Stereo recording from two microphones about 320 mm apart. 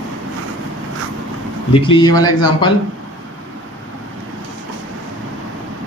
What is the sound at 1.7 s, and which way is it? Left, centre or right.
Speech, centre.